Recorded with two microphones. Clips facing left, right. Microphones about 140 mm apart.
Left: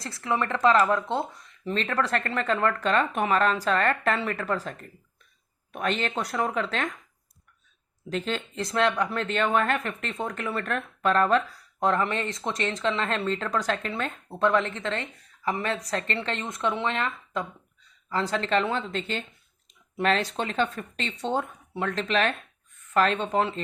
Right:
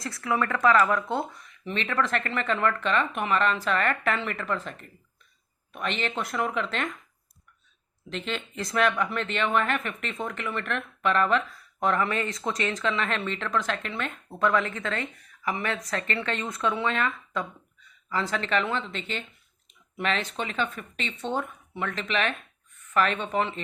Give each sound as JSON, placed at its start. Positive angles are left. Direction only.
{"t": 0.0, "sound": "speech", "side_deg": 25}
{"t": 8.1, "sound": "speech", "side_deg": 40}